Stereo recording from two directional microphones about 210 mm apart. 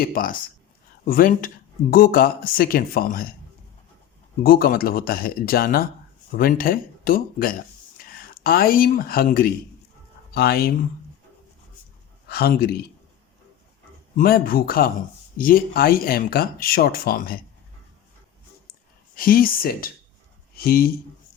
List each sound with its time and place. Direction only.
0.0 s speech: 45° left (ahead or behind)
4.4 s speech: 45° left (ahead or behind)
12.3 s speech: 45° left (ahead or behind)
14.2 s speech: 45° left (ahead or behind)
19.1 s speech: 45° left (ahead or behind)